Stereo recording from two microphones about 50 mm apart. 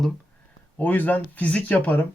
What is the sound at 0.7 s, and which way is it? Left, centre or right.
Speech, left.